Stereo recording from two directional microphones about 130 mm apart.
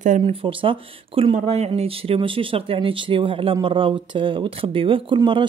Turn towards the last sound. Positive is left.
turn(degrees=-40)  # may be behind; listen again after turning